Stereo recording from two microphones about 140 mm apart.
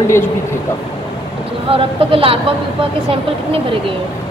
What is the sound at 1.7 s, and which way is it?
Speech, 40° right (ahead or behind).